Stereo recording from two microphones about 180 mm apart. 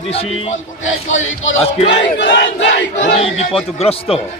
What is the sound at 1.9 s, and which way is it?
Battle cry, 75° left (ahead or behind).